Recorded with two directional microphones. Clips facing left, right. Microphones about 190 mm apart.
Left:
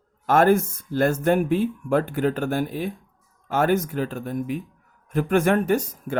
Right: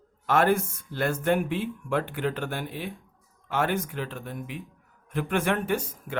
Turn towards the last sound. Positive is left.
turn(degrees=40)  # may be behind; listen again after turning